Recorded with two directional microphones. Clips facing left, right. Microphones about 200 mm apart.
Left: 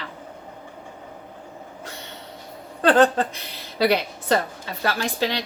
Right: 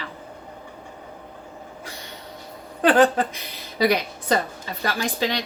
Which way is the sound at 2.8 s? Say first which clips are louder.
Even; 15° right (ahead or behind).